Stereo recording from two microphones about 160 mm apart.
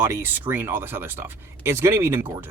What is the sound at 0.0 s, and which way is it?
Speech, 15° right (ahead or behind).